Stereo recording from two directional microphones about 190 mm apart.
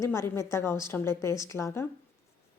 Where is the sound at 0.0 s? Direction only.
15° left (ahead or behind).